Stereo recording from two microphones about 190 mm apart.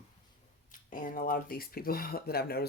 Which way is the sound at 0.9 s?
45° left (ahead or behind).